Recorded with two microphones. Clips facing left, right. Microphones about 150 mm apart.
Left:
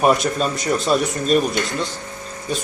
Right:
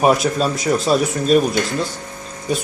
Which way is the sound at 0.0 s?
Centre (ahead or behind).